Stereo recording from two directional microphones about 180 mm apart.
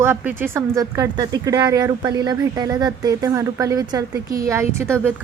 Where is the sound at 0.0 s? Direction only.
10° right (ahead or behind).